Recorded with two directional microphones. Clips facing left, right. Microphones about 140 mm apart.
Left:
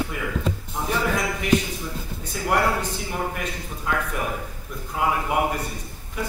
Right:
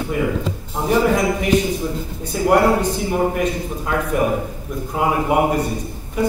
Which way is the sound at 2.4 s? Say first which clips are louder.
Right 8 dB; 30° right (ahead or behind).